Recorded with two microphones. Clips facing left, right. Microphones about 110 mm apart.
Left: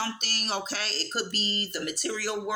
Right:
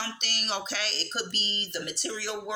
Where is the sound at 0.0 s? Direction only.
40° left (ahead or behind).